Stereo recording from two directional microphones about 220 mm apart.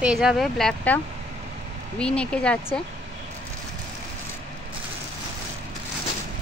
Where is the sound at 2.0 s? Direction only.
5° left (ahead or behind).